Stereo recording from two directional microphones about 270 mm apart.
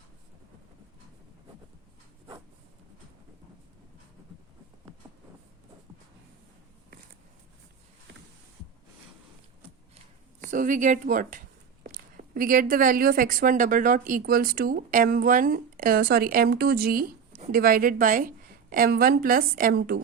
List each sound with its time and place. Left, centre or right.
10.4 s speech: right